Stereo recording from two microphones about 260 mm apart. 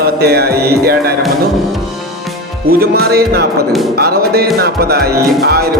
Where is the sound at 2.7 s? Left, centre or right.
Right.